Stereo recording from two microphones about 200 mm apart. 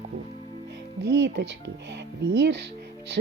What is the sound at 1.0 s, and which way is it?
Speech, 60° right (ahead or behind).